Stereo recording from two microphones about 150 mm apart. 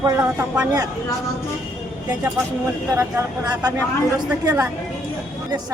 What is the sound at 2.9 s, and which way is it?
Speech, 25° right (ahead or behind).